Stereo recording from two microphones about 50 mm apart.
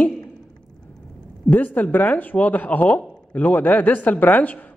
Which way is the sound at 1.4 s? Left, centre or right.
Left.